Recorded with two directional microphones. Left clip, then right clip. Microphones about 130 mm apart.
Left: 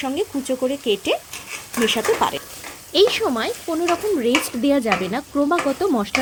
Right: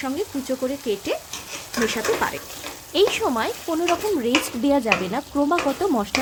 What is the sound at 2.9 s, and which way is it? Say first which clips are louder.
Speech: left 3 dB; 25° left (ahead or behind).